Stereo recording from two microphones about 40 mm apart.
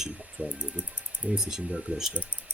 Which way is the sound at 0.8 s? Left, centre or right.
Right.